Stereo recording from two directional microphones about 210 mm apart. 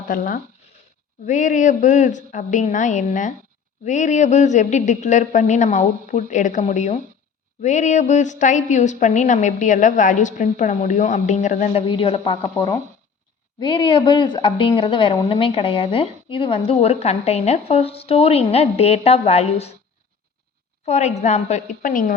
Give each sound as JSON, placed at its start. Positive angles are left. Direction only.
{"t": 0.1, "sound": "a woman's voice", "side_deg": 40}
{"t": 20.8, "sound": "a woman's voice", "side_deg": 35}